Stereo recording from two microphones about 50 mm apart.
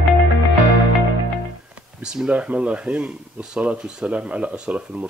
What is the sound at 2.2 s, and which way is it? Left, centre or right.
Speech, right.